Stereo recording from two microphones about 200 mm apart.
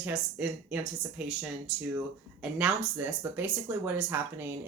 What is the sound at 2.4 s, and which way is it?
Speech, 5° right (ahead or behind).